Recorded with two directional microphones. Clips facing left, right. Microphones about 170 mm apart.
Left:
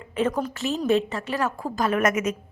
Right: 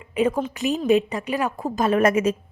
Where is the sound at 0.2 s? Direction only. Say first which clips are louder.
Right 3 dB; 15° right (ahead or behind).